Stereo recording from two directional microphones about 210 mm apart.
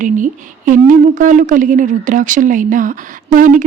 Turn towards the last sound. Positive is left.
turn(degrees=-40)  # may be behind; listen again after turning